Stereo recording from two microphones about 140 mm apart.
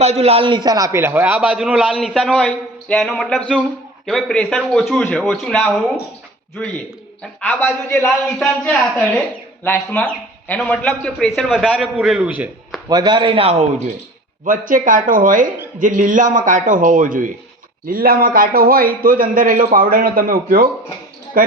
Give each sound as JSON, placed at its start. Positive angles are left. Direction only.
{"t": 0.0, "sound": "a man's voice", "side_deg": -50}
{"t": 7.2, "sound": "a man's voice", "side_deg": 10}
{"t": 12.9, "sound": "a man's voice", "side_deg": -30}
{"t": 14.4, "sound": "a man's voice", "side_deg": -70}
{"t": 17.8, "sound": "a man's voice", "side_deg": -90}